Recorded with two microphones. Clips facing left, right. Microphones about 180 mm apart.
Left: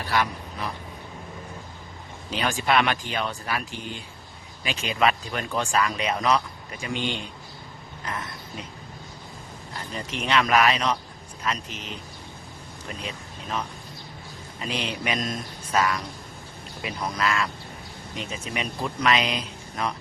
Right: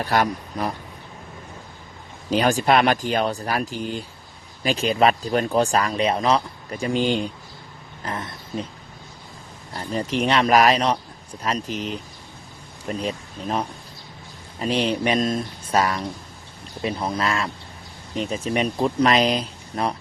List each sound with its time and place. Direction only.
0.0 s speech: 45° right (ahead or behind)
2.3 s speech: 40° right (ahead or behind)
8.0 s speech: 25° right (ahead or behind)
9.7 s a sound: 40° right (ahead or behind)
10.2 s speech: 35° right (ahead or behind)
11.7 s speech: centre (ahead or behind)
12.9 s speech: 40° right (ahead or behind)